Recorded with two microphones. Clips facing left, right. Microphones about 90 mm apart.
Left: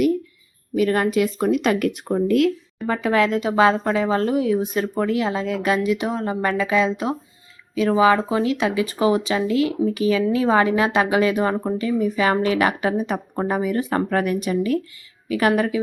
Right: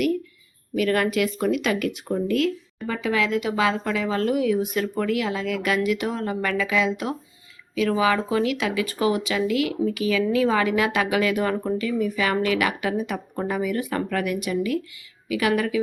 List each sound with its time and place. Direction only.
0.8 s a woman's voice: 30° left (ahead or behind)